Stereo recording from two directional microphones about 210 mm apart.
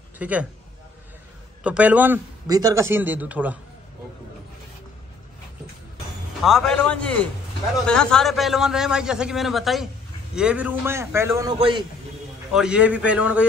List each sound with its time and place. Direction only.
0.2 s a man's voice: 5° right (ahead or behind)
1.6 s a man's voice: 5° right (ahead or behind)
6.4 s a man's voice: centre (ahead or behind)
11.5 s a man's voice: 25° right (ahead or behind)
12.5 s a man's voice: 5° right (ahead or behind)